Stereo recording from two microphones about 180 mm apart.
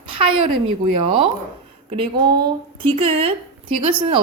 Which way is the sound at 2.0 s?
25° right (ahead or behind).